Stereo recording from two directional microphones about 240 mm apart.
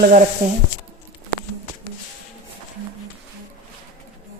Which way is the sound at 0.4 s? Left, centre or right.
Right.